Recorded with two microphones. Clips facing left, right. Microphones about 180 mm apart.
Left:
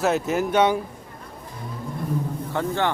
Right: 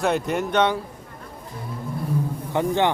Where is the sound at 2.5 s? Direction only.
15° right (ahead or behind).